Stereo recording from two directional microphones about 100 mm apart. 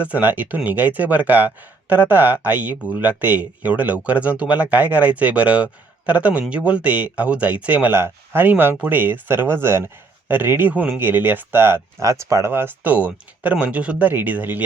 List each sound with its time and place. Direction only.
0.0 s speech: 15° right (ahead or behind)